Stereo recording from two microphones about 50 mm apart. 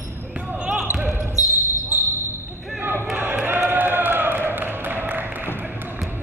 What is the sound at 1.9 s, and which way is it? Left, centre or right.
Basketball bounce, right.